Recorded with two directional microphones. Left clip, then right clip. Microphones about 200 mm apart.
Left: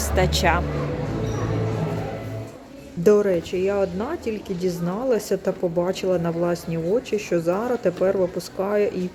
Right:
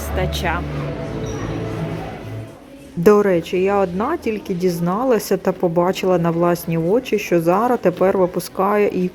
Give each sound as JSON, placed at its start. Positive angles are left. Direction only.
{"t": 0.2, "sound": "speech", "side_deg": 10}
{"t": 3.0, "sound": "speech", "side_deg": -20}